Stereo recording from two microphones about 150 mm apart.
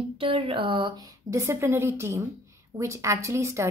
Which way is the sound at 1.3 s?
20° right (ahead or behind).